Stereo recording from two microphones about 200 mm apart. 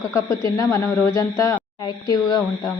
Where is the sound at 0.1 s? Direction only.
15° left (ahead or behind).